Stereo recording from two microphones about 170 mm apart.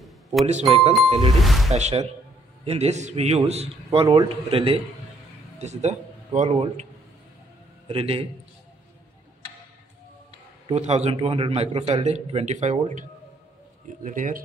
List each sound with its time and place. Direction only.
0.0 s doorbell: centre (ahead or behind)
0.5 s a man's voice: 40° right (ahead or behind)
1.4 s speech: centre (ahead or behind)
1.7 s a man's voice: 40° right (ahead or behind)
7.9 s a man's voice: 35° right (ahead or behind)
10.7 s a man's voice: 40° right (ahead or behind)
14.0 s speech: 50° right (ahead or behind)